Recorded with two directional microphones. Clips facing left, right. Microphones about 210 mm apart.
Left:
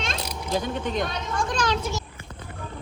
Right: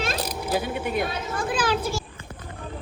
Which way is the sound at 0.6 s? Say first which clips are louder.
Left 2 dB; 10° right (ahead or behind).